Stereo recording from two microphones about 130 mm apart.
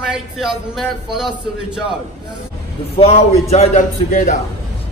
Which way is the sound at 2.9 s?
50° left (ahead or behind).